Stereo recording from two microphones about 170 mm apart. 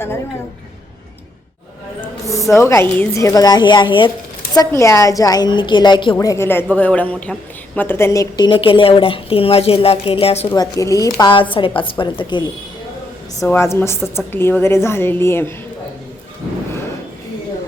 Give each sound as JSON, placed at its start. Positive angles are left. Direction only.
{"t": 2.0, "sound": "a sound", "side_deg": 20}
{"t": 2.5, "sound": "a woman's voice", "side_deg": 15}
{"t": 6.1, "sound": "a woman's voice", "side_deg": 15}
{"t": 10.5, "sound": "a woman's voice", "side_deg": 20}
{"t": 13.4, "sound": "a woman's voice", "side_deg": 15}